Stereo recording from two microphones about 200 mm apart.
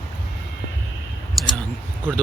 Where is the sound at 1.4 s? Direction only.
Centre (ahead or behind).